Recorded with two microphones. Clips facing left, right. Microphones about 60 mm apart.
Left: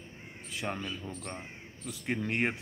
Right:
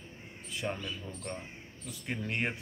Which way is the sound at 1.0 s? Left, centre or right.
Left.